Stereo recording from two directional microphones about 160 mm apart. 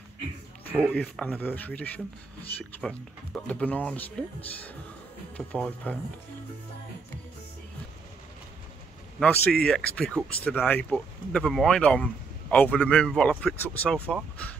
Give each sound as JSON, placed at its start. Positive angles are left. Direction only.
{"t": 0.8, "sound": "speech", "side_deg": 5}
{"t": 5.5, "sound": "speech", "side_deg": 10}
{"t": 9.2, "sound": "speech", "side_deg": 10}